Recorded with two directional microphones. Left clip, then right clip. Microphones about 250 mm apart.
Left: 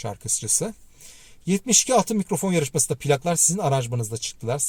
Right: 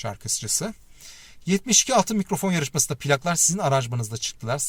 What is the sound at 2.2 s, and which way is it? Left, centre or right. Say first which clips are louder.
Speech: even; right.